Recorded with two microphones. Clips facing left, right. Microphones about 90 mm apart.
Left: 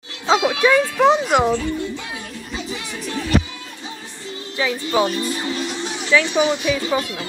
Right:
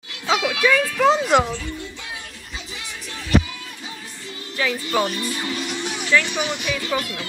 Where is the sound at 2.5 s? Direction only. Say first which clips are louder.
Left 7 dB; 45° left (ahead or behind).